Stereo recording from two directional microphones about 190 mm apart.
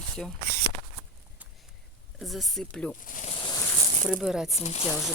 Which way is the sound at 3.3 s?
25° left (ahead or behind).